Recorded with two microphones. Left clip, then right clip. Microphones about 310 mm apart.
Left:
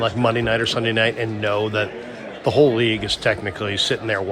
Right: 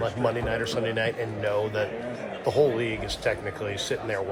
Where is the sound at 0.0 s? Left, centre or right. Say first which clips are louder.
Left 7 dB; left.